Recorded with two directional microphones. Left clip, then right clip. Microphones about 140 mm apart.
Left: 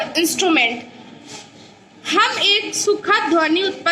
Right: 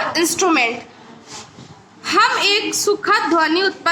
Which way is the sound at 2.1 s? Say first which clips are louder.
Right 1 dB; 20° right (ahead or behind).